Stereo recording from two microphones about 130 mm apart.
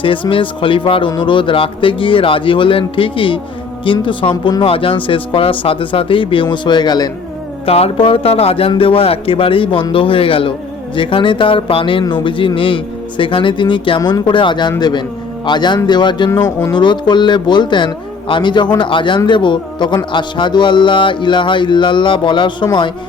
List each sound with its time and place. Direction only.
0.0 s speech: 40° left (ahead or behind)
7.6 s speech: 50° left (ahead or behind)